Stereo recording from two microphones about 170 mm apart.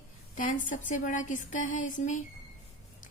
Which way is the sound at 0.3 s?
50° left (ahead or behind).